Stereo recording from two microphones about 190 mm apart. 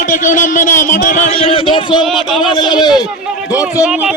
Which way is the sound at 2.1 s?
Centre (ahead or behind).